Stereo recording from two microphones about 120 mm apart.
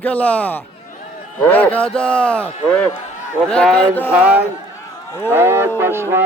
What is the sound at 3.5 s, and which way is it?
Speech, 5° left (ahead or behind).